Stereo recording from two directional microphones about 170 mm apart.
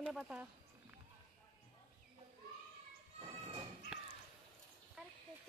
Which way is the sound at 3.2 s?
30° right (ahead or behind).